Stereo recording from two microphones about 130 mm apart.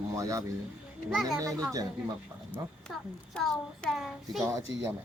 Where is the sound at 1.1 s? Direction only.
Centre (ahead or behind).